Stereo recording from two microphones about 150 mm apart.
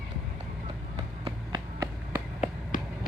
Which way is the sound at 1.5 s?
20° right (ahead or behind).